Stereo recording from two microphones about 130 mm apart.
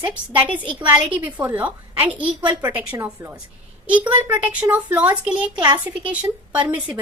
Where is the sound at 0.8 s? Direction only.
10° right (ahead or behind).